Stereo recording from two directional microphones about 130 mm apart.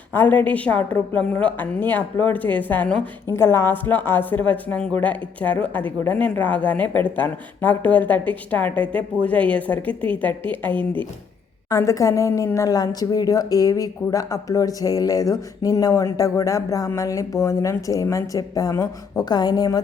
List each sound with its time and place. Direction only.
0.1 s speech: 15° left (ahead or behind)
11.7 s a woman's voice: 25° left (ahead or behind)